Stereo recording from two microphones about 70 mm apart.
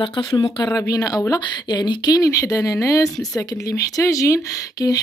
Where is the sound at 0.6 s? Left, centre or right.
Left.